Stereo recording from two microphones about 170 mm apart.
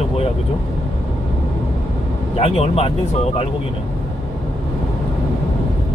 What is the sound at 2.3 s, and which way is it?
Speech, 35° left (ahead or behind).